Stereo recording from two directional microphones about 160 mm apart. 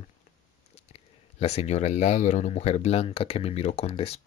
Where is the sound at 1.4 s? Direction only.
45° left (ahead or behind).